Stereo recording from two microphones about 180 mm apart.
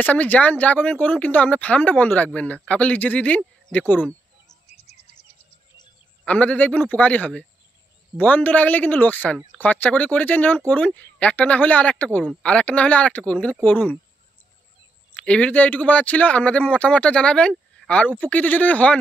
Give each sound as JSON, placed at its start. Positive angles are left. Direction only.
{"t": 0.0, "sound": "speech", "side_deg": 10}
{"t": 4.6, "sound": "chirp", "side_deg": 35}
{"t": 6.2, "sound": "speech", "side_deg": 5}
{"t": 15.1, "sound": "speech", "side_deg": 5}